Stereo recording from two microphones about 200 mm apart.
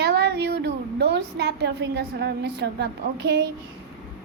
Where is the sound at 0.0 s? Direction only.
60° right (ahead or behind).